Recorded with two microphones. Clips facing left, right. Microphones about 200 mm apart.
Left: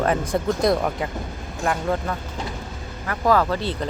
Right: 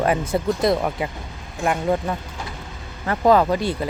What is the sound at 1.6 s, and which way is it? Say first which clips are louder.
Speech: right 2 dB; 15° right (ahead or behind).